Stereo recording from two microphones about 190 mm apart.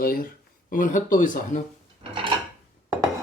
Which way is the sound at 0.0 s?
50° left (ahead or behind).